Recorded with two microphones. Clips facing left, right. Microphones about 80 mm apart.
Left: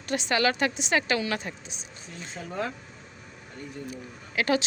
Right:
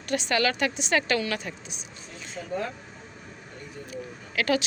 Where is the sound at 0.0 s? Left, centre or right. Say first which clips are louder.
Even; left.